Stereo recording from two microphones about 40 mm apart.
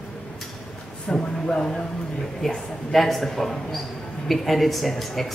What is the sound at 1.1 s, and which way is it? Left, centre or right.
Speech, left.